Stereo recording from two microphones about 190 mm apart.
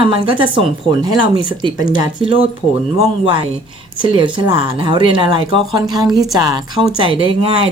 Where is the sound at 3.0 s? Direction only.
25° right (ahead or behind).